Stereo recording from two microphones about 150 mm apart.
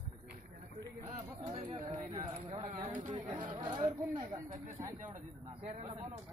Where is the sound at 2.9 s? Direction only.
60° right (ahead or behind).